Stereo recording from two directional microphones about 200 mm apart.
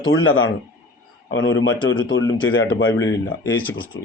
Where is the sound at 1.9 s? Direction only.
20° left (ahead or behind).